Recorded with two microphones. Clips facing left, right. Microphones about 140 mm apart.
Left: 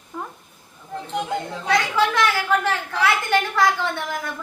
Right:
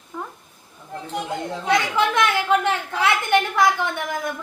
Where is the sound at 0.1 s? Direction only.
10° left (ahead or behind).